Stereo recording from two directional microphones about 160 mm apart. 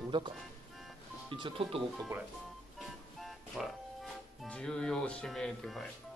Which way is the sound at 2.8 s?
Centre (ahead or behind).